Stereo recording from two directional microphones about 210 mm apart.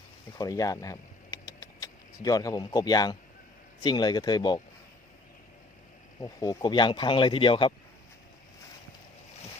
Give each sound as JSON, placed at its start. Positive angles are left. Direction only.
{"t": 0.3, "sound": "a sound", "side_deg": 15}
{"t": 3.8, "sound": "speech", "side_deg": 20}
{"t": 6.1, "sound": "speech", "side_deg": 15}